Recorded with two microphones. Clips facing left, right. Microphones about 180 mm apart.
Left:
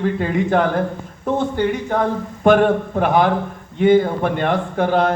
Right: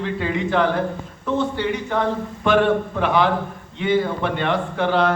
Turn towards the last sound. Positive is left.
turn(degrees=45)  # may be behind; listen again after turning